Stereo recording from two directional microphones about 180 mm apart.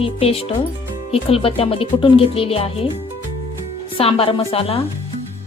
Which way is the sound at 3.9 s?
30° left (ahead or behind).